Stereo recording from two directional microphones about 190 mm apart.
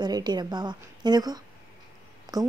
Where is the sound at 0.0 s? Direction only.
20° right (ahead or behind).